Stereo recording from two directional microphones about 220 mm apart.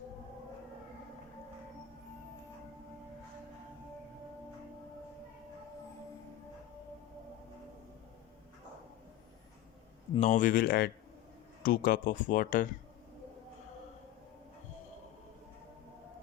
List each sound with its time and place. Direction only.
10.2 s speech: 35° left (ahead or behind)